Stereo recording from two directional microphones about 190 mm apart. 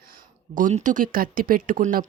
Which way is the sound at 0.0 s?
45° right (ahead or behind).